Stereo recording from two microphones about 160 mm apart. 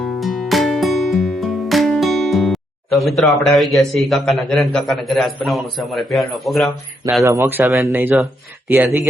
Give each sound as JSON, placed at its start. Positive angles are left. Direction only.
{"t": 0.0, "sound": "music", "side_deg": 0}
{"t": 5.5, "sound": "a man's voice", "side_deg": 0}
{"t": 7.3, "sound": "speech", "side_deg": -15}